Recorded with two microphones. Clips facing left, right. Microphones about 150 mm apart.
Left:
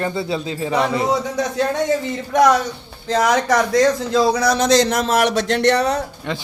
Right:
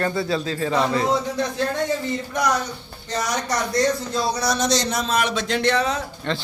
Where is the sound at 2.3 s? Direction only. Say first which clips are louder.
Left 10 dB; 90° left; by 6.0 s 65° left (ahead or behind).